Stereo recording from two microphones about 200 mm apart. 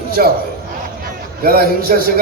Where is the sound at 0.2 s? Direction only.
45° right (ahead or behind).